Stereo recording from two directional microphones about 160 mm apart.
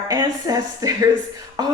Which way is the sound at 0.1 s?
20° right (ahead or behind).